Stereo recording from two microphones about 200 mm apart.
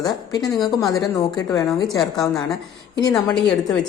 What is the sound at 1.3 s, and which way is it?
Speech, 15° left (ahead or behind).